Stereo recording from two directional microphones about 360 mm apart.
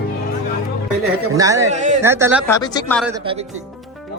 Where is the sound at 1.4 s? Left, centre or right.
Centre.